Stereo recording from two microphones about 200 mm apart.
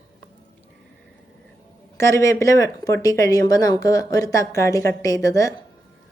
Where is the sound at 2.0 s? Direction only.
15° left (ahead or behind).